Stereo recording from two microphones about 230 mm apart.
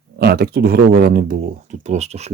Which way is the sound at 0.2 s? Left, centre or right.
Right.